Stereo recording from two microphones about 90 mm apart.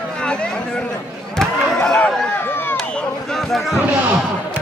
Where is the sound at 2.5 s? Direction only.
25° left (ahead or behind).